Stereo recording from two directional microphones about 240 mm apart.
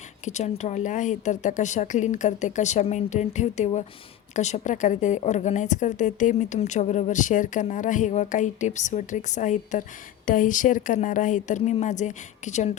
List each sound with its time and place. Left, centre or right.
0.3 s a woman's voice: left